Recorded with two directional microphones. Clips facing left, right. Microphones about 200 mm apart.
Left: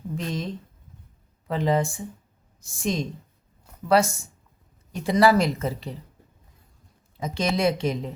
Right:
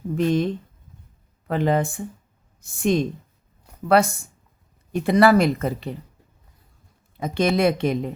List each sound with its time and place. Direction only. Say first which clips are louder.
0.2 s speech: right 12 dB; 60° right (ahead or behind)
7.2 s speech: right 4 dB; 60° right (ahead or behind)